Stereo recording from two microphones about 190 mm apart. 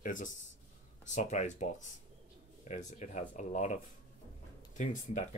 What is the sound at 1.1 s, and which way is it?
Speech, 40° left (ahead or behind).